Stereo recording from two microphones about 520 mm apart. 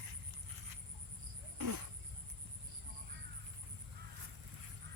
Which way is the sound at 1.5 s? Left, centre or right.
Right.